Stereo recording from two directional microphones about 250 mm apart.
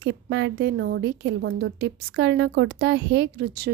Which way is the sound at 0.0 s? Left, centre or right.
Right.